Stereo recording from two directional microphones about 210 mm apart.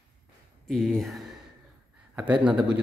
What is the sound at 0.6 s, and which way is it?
A man's voice, centre (ahead or behind).